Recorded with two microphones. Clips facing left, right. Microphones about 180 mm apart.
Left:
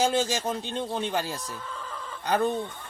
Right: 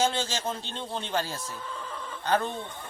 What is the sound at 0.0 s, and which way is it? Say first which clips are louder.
A man's voice: left 3 dB; 15° left (ahead or behind).